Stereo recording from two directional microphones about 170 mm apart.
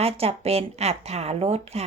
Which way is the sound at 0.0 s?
35° right (ahead or behind).